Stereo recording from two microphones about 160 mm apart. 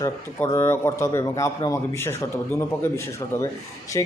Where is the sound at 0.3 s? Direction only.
15° left (ahead or behind).